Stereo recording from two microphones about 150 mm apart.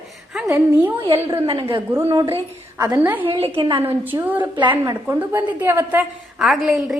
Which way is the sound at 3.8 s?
15° right (ahead or behind).